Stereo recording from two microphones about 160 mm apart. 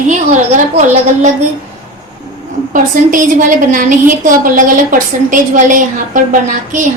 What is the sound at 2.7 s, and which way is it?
A woman's voice, 55° right (ahead or behind).